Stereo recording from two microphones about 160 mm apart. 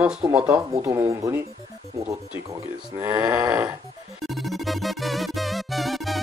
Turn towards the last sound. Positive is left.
turn(degrees=0)  # may be behind; listen again after turning